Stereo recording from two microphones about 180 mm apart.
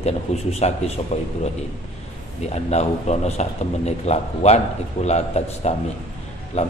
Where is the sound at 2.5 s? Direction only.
40° left (ahead or behind).